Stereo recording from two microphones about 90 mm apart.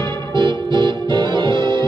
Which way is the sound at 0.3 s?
55° right (ahead or behind).